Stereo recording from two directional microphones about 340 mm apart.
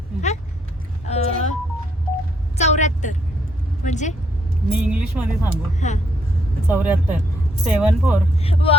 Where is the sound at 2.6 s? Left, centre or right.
Centre.